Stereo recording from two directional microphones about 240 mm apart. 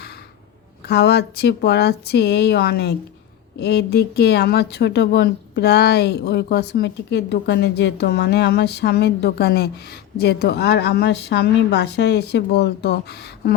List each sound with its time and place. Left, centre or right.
0.9 s speech: left